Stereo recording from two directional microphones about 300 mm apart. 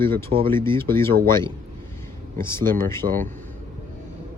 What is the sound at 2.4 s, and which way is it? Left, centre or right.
Speech, centre.